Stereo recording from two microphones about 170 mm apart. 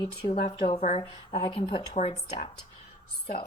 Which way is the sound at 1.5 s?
30° left (ahead or behind).